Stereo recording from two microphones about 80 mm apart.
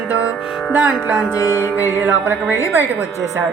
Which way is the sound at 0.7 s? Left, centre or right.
Right.